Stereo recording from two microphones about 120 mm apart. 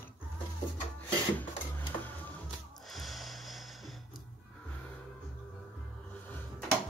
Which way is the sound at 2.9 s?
Centre (ahead or behind).